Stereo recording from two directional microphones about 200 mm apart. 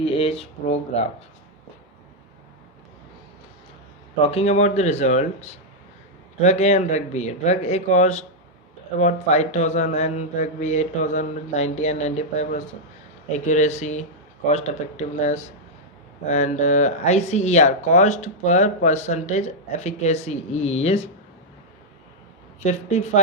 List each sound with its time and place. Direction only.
0.0 s speech: 30° left (ahead or behind)
4.2 s speech: 30° left (ahead or behind)
22.6 s speech: 35° left (ahead or behind)